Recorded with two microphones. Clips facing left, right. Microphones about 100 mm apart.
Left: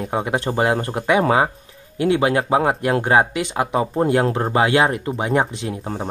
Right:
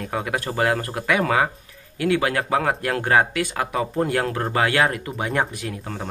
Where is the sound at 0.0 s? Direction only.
25° left (ahead or behind).